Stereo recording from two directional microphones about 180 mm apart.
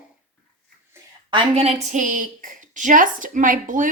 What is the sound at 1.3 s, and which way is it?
A woman's voice, 35° right (ahead or behind).